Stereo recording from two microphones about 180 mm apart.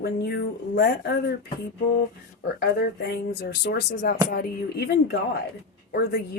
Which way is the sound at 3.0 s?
65° left (ahead or behind).